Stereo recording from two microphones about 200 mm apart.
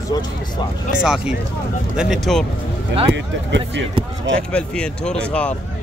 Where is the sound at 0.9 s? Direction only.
5° right (ahead or behind).